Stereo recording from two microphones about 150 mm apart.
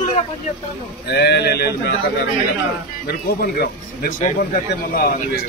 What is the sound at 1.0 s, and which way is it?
Speech, 90° left.